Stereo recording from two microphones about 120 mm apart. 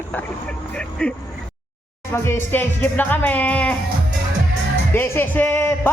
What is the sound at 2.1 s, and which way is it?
Speech, 20° left (ahead or behind).